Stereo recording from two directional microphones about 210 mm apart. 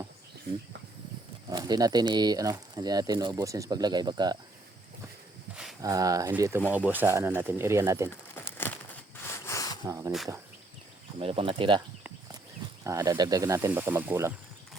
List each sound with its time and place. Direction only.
1.5 s speech: 20° right (ahead or behind)
5.8 s speech: 15° right (ahead or behind)
8.1 s crumpling: 10° left (ahead or behind)
9.2 s a sound: 15° left (ahead or behind)
9.8 s speech: 15° right (ahead or behind)
11.2 s speech: 25° right (ahead or behind)
12.8 s speech: 15° right (ahead or behind)